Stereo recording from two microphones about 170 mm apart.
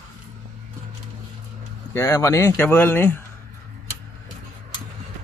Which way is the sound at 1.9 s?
20° left (ahead or behind).